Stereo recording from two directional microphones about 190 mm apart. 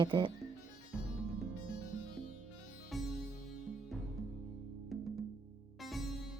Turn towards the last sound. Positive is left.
turn(degrees=0)  # may be behind; listen again after turning